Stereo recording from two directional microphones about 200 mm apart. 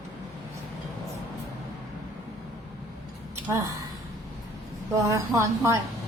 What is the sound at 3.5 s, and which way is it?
Speech, 15° right (ahead or behind).